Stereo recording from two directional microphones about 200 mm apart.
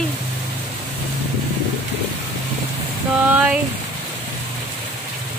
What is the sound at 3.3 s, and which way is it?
Speech, 10° right (ahead or behind).